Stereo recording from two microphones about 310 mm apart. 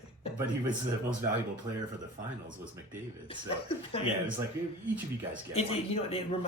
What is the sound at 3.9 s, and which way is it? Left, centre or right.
Speech, centre.